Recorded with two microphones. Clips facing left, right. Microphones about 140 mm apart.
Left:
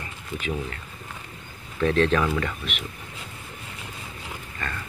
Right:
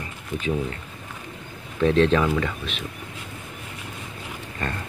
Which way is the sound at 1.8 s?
25° right (ahead or behind).